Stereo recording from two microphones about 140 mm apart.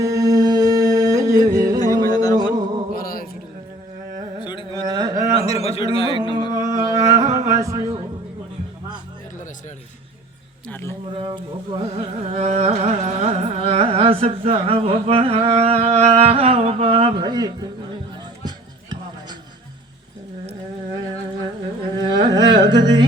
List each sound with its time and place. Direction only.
0.0 s singing: 25° right (ahead or behind)
1.8 s music: 25° left (ahead or behind)
2.9 s music: 90° left
4.4 s carnatic music: 35° left (ahead or behind)
4.7 s a sound: 30° right (ahead or behind)
5.5 s a sound: 45° left (ahead or behind)
6.0 s music: 35° left (ahead or behind)
6.5 s a sound: 25° right (ahead or behind)
10.7 s speech: 15° left (ahead or behind)
11.1 s carnatic music: 35° right (ahead or behind)
18.4 s music: 30° right (ahead or behind)
22.0 s a sound: 30° right (ahead or behind)